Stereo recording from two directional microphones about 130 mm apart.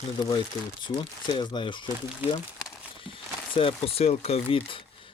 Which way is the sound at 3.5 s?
45° left (ahead or behind).